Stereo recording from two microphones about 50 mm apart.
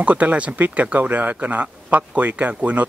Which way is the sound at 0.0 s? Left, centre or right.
Right.